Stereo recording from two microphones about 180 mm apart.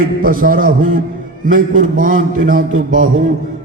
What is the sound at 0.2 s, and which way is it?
A man's voice, 50° right (ahead or behind).